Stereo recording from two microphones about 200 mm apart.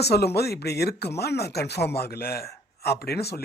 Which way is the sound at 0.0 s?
55° left (ahead or behind).